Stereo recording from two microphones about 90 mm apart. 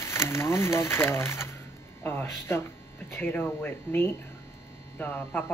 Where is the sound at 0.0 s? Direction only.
30° left (ahead or behind).